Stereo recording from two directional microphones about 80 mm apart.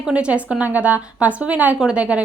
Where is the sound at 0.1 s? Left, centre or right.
Centre.